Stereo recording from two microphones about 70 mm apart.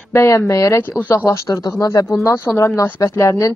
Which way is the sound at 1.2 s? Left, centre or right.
Left.